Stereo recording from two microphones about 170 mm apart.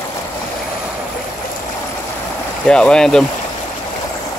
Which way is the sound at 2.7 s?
5° left (ahead or behind).